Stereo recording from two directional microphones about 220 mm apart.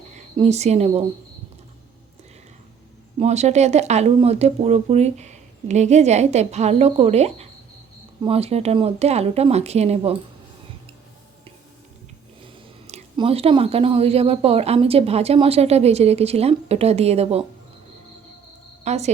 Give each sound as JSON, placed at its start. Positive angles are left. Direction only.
{"t": 0.3, "sound": "speech", "side_deg": -30}
{"t": 3.2, "sound": "speech", "side_deg": -30}
{"t": 12.9, "sound": "speech", "side_deg": -25}
{"t": 18.9, "sound": "speech", "side_deg": -30}